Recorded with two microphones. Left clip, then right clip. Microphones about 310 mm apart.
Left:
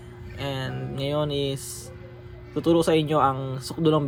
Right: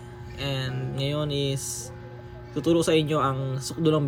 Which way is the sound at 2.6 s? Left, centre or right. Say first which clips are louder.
Left 1 dB; centre.